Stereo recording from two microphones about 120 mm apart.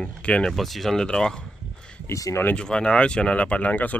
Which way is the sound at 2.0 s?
25° left (ahead or behind).